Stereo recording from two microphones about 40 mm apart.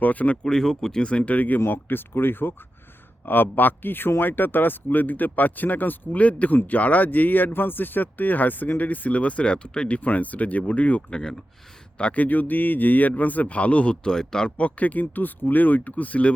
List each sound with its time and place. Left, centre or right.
0.0 s speech: left
0.4 s speech: centre
1.0 s speech: left
1.6 s speech: left
11.1 s speech: centre
12.1 s speech: left; by 14.5 s centre
14.6 s speech: left